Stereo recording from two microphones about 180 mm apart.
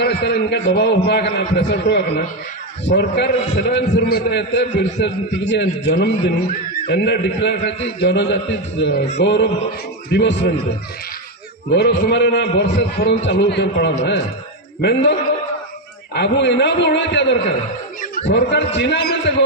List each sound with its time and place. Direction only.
0.0 s a man's voice: 65° left (ahead or behind)
8.8 s music: 60° left (ahead or behind)
9.1 s a man's voice: 70° left (ahead or behind)
11.7 s a man's voice: 70° left (ahead or behind)
18.0 s a sound: 45° left (ahead or behind)
18.3 s a man's voice: 70° left (ahead or behind)